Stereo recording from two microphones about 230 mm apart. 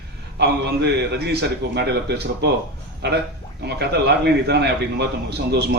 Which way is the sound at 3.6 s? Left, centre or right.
Right.